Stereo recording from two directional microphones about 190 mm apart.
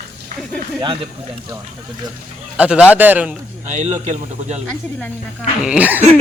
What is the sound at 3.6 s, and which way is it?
Speech, 40° right (ahead or behind).